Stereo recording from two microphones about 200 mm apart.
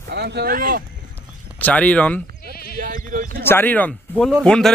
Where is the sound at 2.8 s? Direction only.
45° right (ahead or behind).